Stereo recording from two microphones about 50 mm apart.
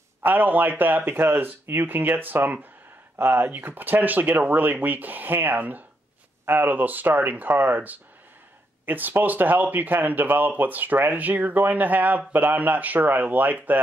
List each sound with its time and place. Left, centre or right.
0.2 s speech: right
3.4 s speech: right